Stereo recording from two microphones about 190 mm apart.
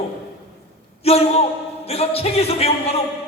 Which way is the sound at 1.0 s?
30° left (ahead or behind).